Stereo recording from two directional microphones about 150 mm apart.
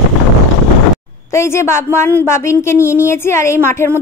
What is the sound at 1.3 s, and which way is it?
A woman's voice, 15° left (ahead or behind).